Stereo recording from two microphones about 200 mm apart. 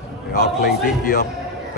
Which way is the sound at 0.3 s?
45° left (ahead or behind).